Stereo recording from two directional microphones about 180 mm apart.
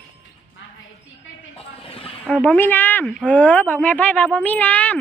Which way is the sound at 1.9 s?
30° left (ahead or behind).